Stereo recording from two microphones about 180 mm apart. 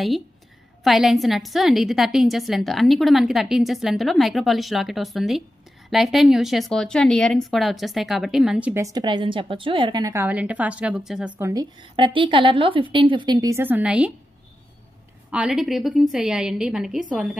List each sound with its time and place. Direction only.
0.8 s a woman's voice: centre (ahead or behind)
11.9 s a woman's voice: 30° right (ahead or behind); by 14.1 s 5° right (ahead or behind)
15.3 s a woman's voice: 5° right (ahead or behind)